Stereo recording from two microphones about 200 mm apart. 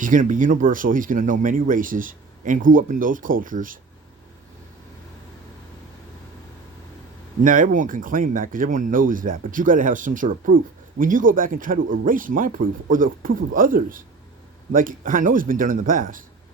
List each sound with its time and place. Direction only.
0.0 s speech: 40° right (ahead or behind)
7.4 s speech: 40° right (ahead or behind)